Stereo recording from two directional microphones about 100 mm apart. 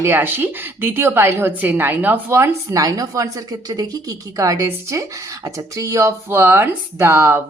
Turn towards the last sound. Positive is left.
turn(degrees=-25)  # may be behind; listen again after turning